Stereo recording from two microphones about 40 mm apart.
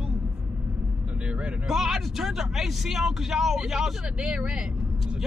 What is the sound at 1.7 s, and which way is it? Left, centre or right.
Speech, centre.